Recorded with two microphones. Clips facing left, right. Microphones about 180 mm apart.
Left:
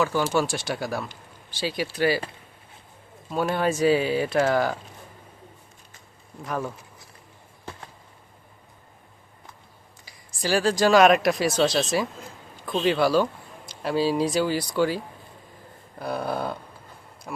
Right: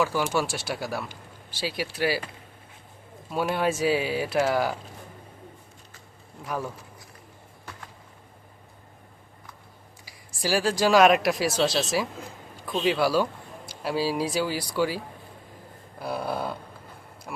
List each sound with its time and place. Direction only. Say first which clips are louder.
0.0 s speech: left 2 dB; 5° right (ahead or behind)
3.2 s speech: left 1 dB; 5° right (ahead or behind)
7.6 s a sound: left 4 dB; 25° left (ahead or behind)
10.1 s speech: left 2 dB; 5° right (ahead or behind)